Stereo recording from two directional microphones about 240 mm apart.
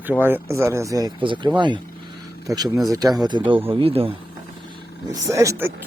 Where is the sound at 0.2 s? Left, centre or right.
Centre.